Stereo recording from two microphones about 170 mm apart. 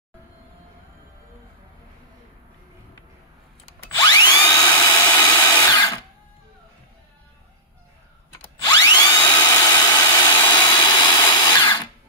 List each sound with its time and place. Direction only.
3.9 s drill: 25° left (ahead or behind)
8.4 s tools: 25° left (ahead or behind)
9.3 s a sound: 25° left (ahead or behind)